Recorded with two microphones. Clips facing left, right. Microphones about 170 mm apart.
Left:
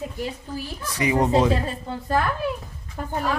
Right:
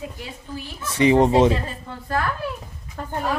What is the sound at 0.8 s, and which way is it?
Speech, 25° right (ahead or behind).